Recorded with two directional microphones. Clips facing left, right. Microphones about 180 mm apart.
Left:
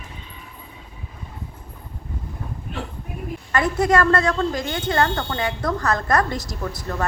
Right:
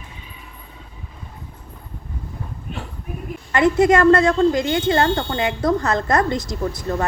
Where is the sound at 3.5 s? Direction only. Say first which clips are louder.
Right 4 dB; 20° right (ahead or behind).